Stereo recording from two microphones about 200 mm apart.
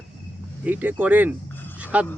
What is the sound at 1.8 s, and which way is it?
Dog, 5° right (ahead or behind).